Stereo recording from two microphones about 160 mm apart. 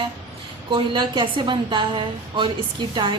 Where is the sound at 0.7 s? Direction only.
30° right (ahead or behind).